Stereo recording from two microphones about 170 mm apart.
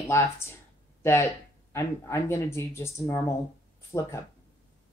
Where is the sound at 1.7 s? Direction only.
15° left (ahead or behind).